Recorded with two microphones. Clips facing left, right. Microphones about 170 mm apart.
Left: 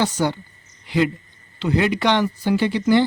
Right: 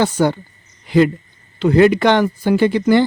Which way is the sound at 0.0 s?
55° right (ahead or behind).